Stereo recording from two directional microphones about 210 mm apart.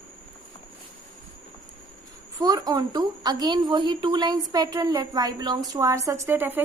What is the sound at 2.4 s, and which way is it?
A woman's voice, 20° right (ahead or behind).